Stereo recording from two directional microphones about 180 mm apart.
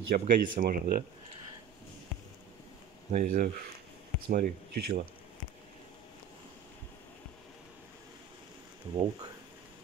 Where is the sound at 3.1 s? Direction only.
45° right (ahead or behind).